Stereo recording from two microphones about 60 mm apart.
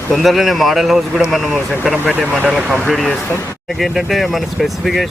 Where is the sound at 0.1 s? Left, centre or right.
Centre.